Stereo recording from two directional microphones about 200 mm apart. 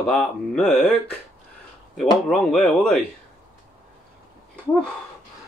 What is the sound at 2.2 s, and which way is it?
Speech, centre (ahead or behind).